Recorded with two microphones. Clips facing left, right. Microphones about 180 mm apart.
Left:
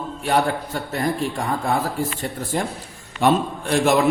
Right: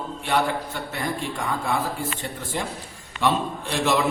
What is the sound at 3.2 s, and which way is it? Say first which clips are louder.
Speech: left 5 dB; 50° left (ahead or behind).